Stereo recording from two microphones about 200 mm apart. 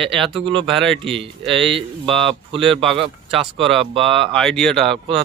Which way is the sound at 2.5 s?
25° right (ahead or behind).